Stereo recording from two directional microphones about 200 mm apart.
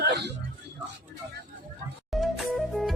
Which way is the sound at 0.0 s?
55° right (ahead or behind).